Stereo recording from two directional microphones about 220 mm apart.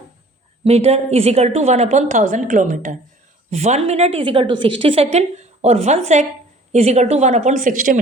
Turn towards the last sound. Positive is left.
turn(degrees=-35)  # may be behind; listen again after turning